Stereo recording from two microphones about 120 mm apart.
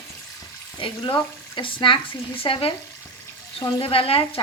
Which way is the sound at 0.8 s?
45° left (ahead or behind).